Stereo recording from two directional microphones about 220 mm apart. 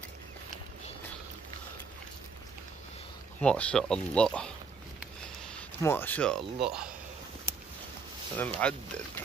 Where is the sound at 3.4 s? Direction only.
5° left (ahead or behind).